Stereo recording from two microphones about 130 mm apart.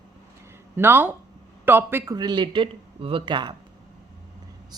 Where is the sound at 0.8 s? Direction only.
15° right (ahead or behind).